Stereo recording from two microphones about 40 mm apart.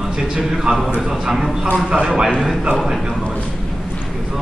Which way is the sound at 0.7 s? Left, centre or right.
Right.